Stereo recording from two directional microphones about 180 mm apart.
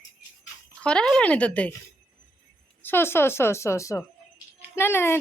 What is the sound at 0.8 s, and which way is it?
Speech, 5° left (ahead or behind).